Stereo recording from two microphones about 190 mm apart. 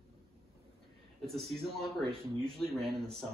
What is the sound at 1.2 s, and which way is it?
A man's voice, centre (ahead or behind).